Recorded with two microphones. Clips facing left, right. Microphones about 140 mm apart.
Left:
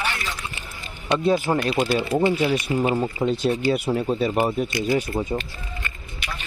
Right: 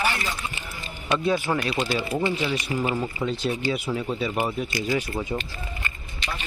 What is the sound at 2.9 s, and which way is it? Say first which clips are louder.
Speech: left 4 dB; 25° left (ahead or behind).